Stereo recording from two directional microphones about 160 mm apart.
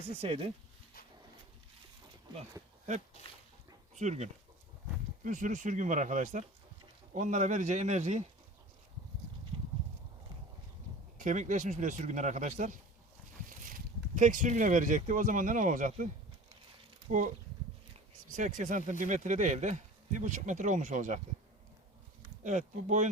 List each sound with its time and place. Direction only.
0.0 s speech: 35° right (ahead or behind)
3.2 s speech: 45° left (ahead or behind)
3.9 s speech: 45° right (ahead or behind)
11.2 s speech: 50° right (ahead or behind)
17.1 s speech: 55° right (ahead or behind)
22.4 s speech: 50° right (ahead or behind)